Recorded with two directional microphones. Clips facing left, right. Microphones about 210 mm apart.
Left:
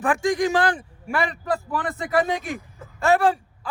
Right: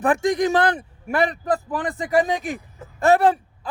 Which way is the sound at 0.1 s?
20° right (ahead or behind).